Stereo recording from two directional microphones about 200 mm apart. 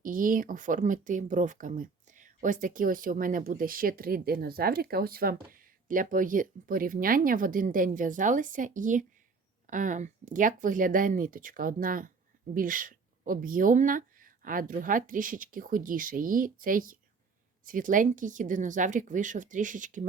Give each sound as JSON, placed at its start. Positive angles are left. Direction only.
{"t": 0.0, "sound": "speech", "side_deg": -40}